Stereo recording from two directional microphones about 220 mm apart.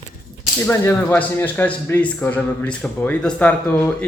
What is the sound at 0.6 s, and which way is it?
Speech, 10° left (ahead or behind).